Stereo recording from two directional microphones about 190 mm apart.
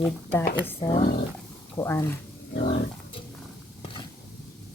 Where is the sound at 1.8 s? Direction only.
15° left (ahead or behind).